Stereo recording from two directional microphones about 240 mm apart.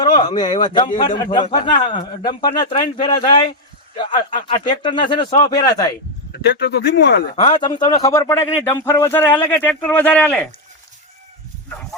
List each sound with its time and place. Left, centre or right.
0.0 s a sound: centre
0.6 s a man's voice: centre
6.3 s speech: left
7.3 s a man's voice: centre